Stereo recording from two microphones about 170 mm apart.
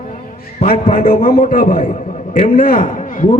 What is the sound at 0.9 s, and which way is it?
A man's voice, 55° left (ahead or behind).